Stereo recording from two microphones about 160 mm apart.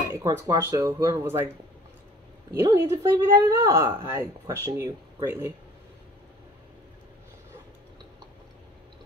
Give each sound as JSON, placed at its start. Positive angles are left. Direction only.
{"t": 0.1, "sound": "speech", "side_deg": -15}
{"t": 2.5, "sound": "speech", "side_deg": -15}